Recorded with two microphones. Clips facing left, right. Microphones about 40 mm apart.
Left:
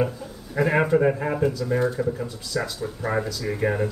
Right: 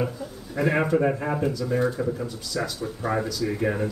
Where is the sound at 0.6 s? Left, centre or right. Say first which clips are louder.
Left 2 dB; centre.